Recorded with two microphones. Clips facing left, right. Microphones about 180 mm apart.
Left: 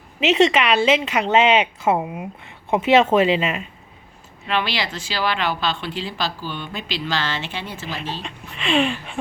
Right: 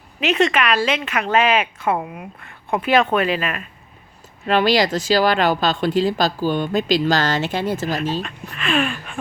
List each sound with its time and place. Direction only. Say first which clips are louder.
0.3 s speech: left 2 dB; 20° left (ahead or behind)
4.4 s speech: right 8 dB; 40° right (ahead or behind)
8.6 s speech: left 1 dB; 20° left (ahead or behind)